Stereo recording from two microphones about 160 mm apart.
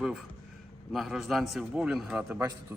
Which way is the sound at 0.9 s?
Centre (ahead or behind).